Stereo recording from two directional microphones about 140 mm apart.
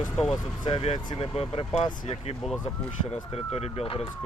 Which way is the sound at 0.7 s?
40° left (ahead or behind).